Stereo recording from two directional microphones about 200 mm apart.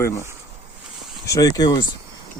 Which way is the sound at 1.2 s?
15° left (ahead or behind).